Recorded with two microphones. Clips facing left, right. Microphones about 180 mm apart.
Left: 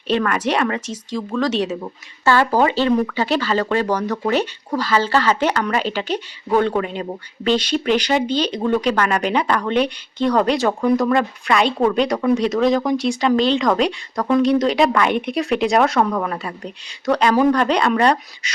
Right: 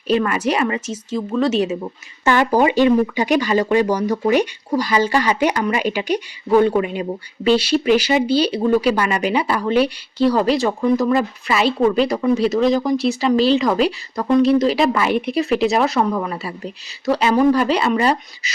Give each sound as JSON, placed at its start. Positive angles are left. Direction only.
{"t": 0.1, "sound": "speech", "side_deg": -5}